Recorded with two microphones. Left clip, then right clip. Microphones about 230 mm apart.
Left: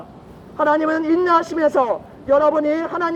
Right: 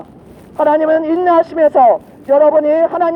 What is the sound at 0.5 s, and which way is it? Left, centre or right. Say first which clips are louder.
A woman's voice: right 6 dB; right.